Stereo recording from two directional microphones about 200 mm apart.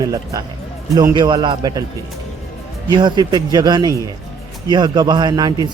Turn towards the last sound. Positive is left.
turn(degrees=-20)  # may be behind; listen again after turning